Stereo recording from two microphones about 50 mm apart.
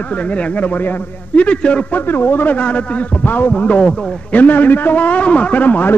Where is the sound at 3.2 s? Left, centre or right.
Left.